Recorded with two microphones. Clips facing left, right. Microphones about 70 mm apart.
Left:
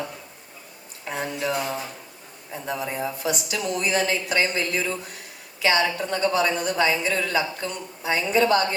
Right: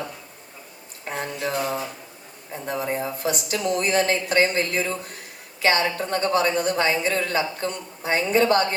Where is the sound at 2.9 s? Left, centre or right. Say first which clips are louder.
Right 2 dB; right.